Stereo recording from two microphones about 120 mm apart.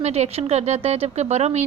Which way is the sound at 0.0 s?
65° right (ahead or behind).